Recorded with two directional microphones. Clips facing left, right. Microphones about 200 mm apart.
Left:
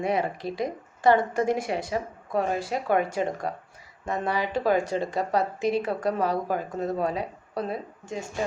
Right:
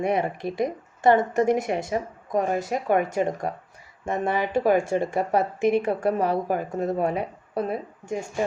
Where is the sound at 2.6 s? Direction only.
45° right (ahead or behind).